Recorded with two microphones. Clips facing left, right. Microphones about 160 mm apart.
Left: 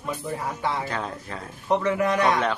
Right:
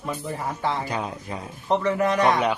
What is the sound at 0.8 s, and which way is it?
A man's voice, 15° right (ahead or behind).